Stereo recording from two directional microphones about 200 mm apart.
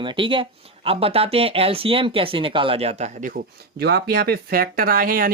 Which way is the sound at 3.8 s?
55° right (ahead or behind).